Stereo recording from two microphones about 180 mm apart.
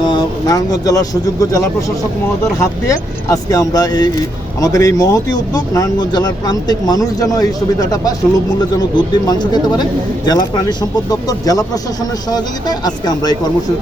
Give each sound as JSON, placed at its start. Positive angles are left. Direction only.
{"t": 0.0, "sound": "speech", "side_deg": 25}